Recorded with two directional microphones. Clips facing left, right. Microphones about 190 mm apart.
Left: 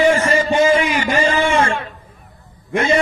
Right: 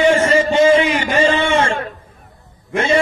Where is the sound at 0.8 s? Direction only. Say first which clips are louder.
Right 2 dB; 30° right (ahead or behind).